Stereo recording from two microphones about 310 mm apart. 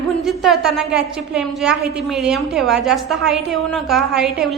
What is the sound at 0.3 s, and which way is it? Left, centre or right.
A woman's voice, centre.